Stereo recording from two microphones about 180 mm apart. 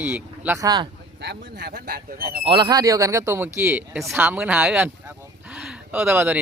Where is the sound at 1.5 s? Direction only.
65° right (ahead or behind).